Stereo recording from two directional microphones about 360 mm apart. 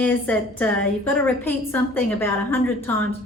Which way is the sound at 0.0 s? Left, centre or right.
Centre.